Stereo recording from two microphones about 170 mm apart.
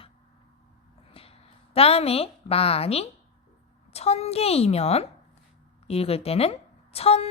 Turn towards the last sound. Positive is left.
turn(degrees=35)  # may be behind; listen again after turning